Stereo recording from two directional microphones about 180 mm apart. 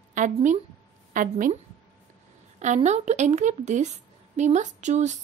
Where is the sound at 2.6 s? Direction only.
40° right (ahead or behind).